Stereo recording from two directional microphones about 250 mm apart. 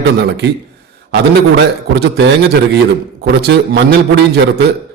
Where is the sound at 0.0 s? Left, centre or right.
Right.